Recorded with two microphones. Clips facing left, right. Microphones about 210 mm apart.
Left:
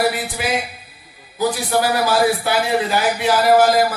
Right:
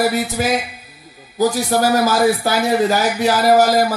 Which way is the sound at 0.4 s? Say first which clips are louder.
Right 3 dB; 40° right (ahead or behind).